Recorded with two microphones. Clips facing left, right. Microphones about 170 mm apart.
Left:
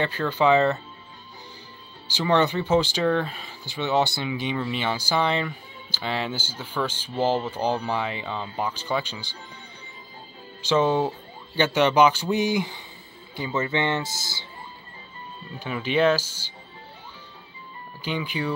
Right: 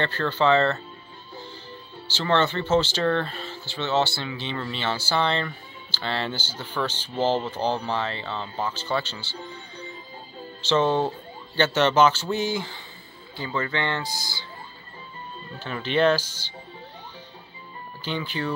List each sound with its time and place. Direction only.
0.0 s speech: 10° left (ahead or behind)
2.0 s speech: 15° left (ahead or behind)
10.6 s speech: 10° left (ahead or behind)
15.6 s speech: 10° left (ahead or behind)
18.0 s speech: 10° left (ahead or behind)